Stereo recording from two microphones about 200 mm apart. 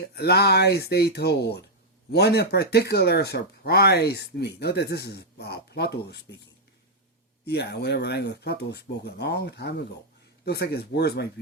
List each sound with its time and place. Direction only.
0.0 s speech: 55° left (ahead or behind)
7.4 s speech: 55° left (ahead or behind)